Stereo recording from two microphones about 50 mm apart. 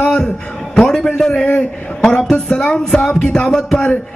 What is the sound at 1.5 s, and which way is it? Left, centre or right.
Speech, left.